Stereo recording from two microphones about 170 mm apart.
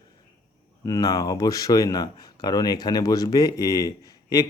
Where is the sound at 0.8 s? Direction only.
20° left (ahead or behind).